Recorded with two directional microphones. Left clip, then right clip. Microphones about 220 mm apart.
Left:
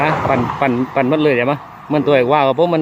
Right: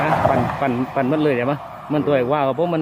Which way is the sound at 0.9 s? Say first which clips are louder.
Left 4 dB; 20° left (ahead or behind).